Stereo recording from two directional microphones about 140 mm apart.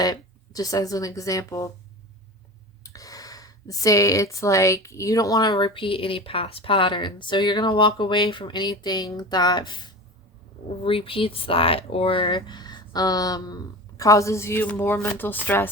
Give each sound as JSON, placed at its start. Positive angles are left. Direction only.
{"t": 0.0, "sound": "speech", "side_deg": 25}
{"t": 2.8, "sound": "speech", "side_deg": 25}